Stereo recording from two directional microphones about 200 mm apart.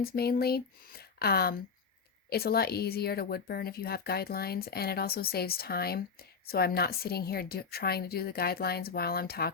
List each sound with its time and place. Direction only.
0.0 s speech: 50° left (ahead or behind)